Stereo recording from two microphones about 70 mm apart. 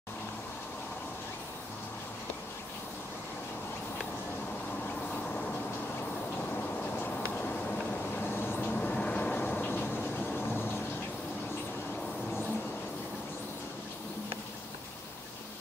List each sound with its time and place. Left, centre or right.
6.5 s a sound: left
8.2 s vehicle: left
8.6 s vehicle: centre